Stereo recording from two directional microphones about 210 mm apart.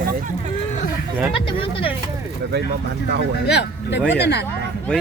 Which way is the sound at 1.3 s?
25° left (ahead or behind).